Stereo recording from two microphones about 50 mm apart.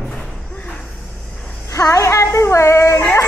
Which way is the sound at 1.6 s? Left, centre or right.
Left.